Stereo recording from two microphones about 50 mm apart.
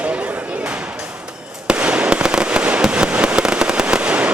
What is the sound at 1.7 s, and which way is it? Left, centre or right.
Fireworks, right.